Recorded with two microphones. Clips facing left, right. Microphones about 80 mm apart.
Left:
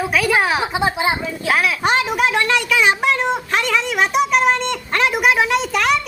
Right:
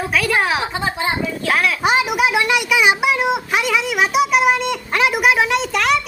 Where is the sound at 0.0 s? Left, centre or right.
Centre.